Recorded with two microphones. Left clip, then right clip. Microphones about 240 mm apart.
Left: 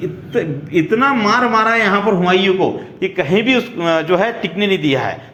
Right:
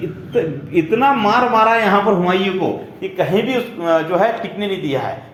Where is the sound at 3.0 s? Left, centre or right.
Left.